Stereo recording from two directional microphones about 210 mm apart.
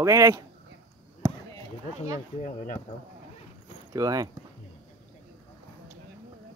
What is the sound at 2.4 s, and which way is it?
Speech, 40° left (ahead or behind).